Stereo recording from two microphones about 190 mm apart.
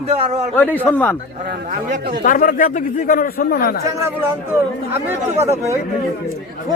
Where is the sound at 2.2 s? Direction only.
45° left (ahead or behind).